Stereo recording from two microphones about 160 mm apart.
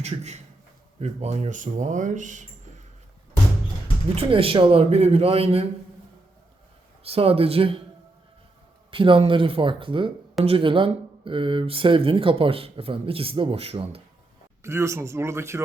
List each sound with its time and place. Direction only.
0.0 s speech: 45° right (ahead or behind)
4.1 s speech: 35° right (ahead or behind)
7.0 s speech: 35° right (ahead or behind)
8.9 s speech: 35° right (ahead or behind)
14.6 s speech: 15° right (ahead or behind)